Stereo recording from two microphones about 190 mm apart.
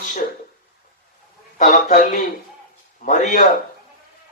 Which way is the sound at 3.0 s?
40° left (ahead or behind).